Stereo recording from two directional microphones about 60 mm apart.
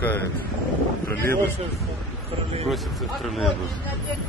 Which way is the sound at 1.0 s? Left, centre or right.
Left.